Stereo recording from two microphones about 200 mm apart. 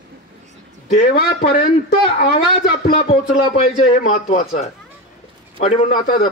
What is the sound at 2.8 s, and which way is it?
Speech, 30° left (ahead or behind).